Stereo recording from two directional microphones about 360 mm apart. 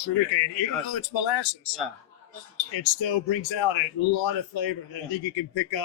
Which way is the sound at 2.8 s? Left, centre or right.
Left.